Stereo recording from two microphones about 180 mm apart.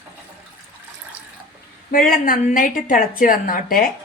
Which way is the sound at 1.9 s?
50° left (ahead or behind).